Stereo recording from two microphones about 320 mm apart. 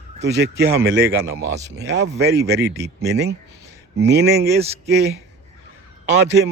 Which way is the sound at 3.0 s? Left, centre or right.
Right.